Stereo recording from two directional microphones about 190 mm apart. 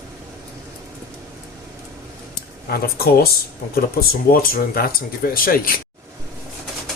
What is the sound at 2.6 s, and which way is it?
Speech, 55° left (ahead or behind).